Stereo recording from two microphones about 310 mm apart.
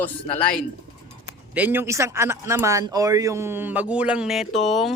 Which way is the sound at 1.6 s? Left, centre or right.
Centre.